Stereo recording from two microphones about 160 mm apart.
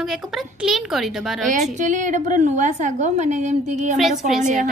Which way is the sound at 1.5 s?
50° right (ahead or behind).